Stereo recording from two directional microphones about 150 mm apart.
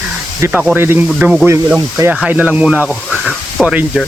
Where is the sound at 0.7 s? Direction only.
15° right (ahead or behind).